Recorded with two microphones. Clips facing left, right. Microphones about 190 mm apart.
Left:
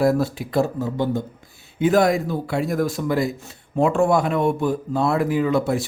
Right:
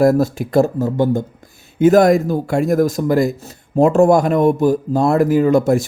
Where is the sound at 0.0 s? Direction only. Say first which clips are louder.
Right 6 dB; 45° right (ahead or behind).